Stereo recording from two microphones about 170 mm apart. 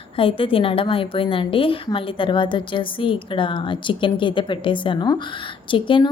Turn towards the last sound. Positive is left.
turn(degrees=30)  # may be behind; listen again after turning